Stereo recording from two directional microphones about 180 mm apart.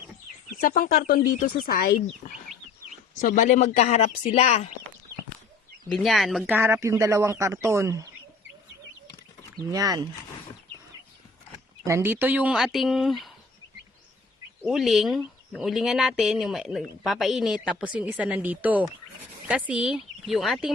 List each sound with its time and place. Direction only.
0.5 s speech: 55° left (ahead or behind)
3.2 s speech: 45° left (ahead or behind)
5.9 s speech: centre (ahead or behind)
6.4 s speech: 10° right (ahead or behind)
9.6 s speech: 20° right (ahead or behind)
11.9 s speech: 15° right (ahead or behind)
14.7 s speech: centre (ahead or behind)